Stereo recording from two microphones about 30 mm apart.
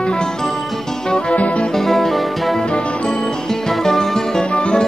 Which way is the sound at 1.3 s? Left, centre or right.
Left.